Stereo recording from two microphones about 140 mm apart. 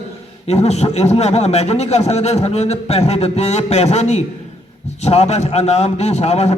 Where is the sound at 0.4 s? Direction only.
50° left (ahead or behind).